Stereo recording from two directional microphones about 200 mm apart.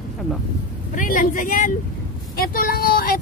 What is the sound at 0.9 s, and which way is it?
A woman's voice, 40° left (ahead or behind).